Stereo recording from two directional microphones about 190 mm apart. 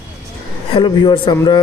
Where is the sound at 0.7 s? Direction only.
25° left (ahead or behind).